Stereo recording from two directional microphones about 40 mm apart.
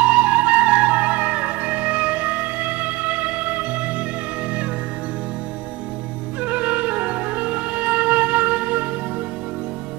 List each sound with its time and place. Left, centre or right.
0.0 s music: right
6.4 s music: right